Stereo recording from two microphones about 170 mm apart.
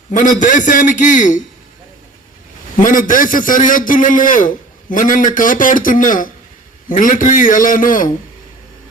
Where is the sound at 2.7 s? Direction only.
50° left (ahead or behind).